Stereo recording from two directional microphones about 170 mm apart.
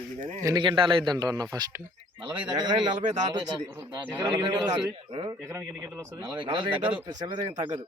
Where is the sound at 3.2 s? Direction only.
25° right (ahead or behind).